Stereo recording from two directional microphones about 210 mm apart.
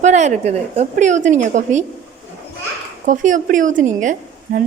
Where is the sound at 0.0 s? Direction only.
35° right (ahead or behind).